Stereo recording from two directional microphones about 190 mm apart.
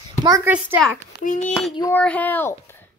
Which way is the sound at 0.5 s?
10° right (ahead or behind).